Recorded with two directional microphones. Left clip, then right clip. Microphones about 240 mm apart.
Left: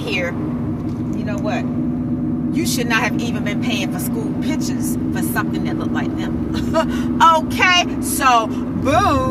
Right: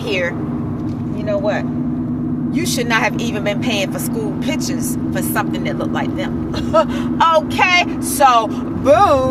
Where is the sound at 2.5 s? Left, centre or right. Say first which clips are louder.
Right 2 dB; centre.